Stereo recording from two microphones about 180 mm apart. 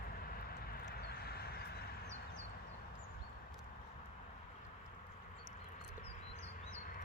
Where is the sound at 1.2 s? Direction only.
60° left (ahead or behind).